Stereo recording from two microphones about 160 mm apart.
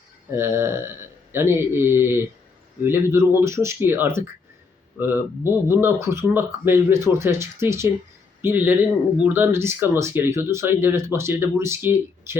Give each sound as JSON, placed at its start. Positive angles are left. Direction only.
{"t": 0.3, "sound": "a man's voice", "side_deg": -15}